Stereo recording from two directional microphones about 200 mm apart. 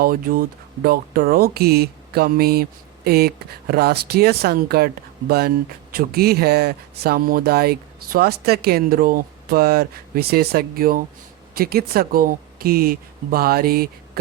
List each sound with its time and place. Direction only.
0.0 s speech: 45° right (ahead or behind)
5.9 s speech: 50° right (ahead or behind)